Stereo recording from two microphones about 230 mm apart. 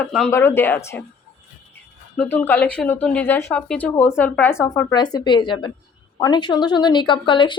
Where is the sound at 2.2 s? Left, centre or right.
Centre.